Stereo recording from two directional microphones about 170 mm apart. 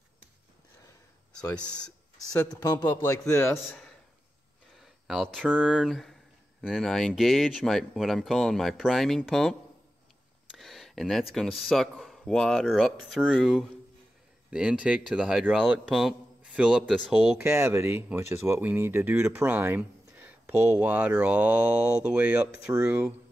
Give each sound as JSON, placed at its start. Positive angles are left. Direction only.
{"t": 2.3, "sound": "a man's voice", "side_deg": 20}
{"t": 4.7, "sound": "speech", "side_deg": 0}
{"t": 10.6, "sound": "speech", "side_deg": 0}
{"t": 17.4, "sound": "speech", "side_deg": -15}